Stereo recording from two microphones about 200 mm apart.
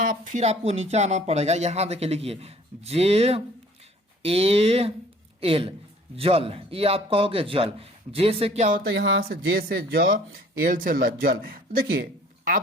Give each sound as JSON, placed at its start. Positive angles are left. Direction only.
{"t": 0.0, "sound": "a man's voice", "side_deg": -40}
{"t": 8.9, "sound": "speech", "side_deg": -65}